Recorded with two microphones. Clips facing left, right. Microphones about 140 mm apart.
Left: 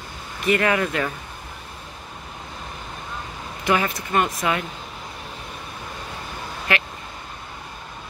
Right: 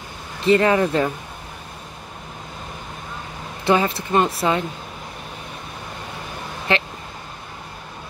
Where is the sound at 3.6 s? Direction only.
30° right (ahead or behind).